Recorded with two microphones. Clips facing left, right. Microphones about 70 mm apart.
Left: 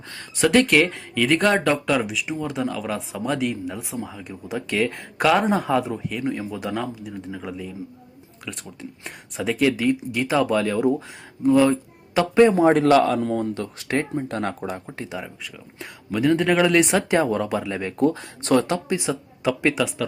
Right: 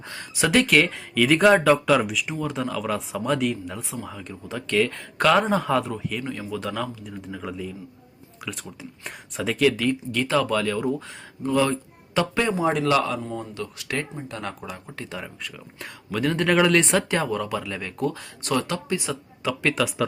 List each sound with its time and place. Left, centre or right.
0.3 s speech: centre
6.2 s speech: left
7.0 s speech: centre
9.6 s speech: centre
12.5 s a man's voice: left
14.9 s speech: left
15.2 s speech: centre
17.2 s speech: left